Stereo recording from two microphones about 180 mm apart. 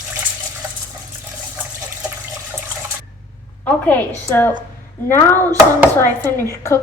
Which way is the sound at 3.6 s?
10° left (ahead or behind).